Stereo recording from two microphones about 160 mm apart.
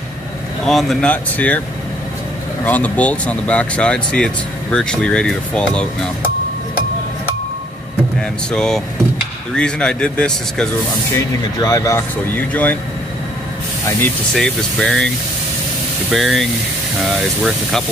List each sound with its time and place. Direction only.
0.7 s speech: centre (ahead or behind)
2.6 s speech: 10° left (ahead or behind)
8.2 s a man's voice: 5° left (ahead or behind)
11.1 s speech: 20° left (ahead or behind)
14.3 s a man's voice: 5° left (ahead or behind)
16.1 s a man's voice: centre (ahead or behind)